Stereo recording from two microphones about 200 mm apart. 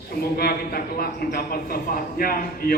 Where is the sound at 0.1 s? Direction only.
50° left (ahead or behind).